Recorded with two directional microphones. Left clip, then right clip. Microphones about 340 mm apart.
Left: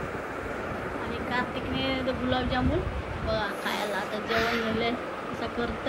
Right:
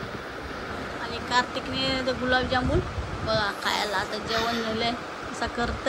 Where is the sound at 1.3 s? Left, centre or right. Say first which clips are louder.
Right 6 dB; centre.